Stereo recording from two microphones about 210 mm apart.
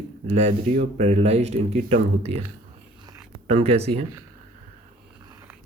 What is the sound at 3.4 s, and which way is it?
Speech, 30° right (ahead or behind).